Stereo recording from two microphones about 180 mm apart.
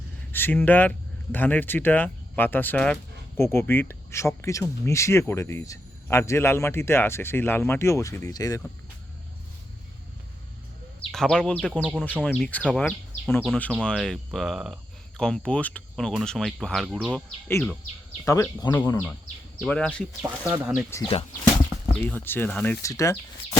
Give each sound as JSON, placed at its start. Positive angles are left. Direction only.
{"t": 0.3, "sound": "speech", "side_deg": 10}
{"t": 11.1, "sound": "speech", "side_deg": 5}
{"t": 18.3, "sound": "speech", "side_deg": 15}
{"t": 20.2, "sound": "speech", "side_deg": -20}
{"t": 20.9, "sound": "speech", "side_deg": 15}